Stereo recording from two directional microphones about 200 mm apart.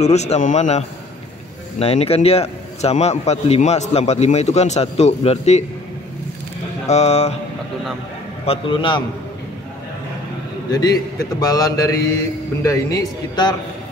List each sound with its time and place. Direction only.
0.0 s a man's voice: 35° left (ahead or behind)
6.9 s a man's voice: 35° left (ahead or behind)
8.5 s a man's voice: 25° left (ahead or behind)
10.7 s a man's voice: 20° left (ahead or behind)